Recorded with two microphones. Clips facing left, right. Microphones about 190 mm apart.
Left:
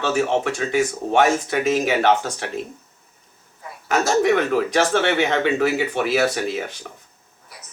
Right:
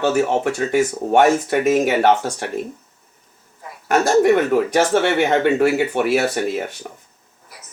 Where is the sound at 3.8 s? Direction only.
55° right (ahead or behind).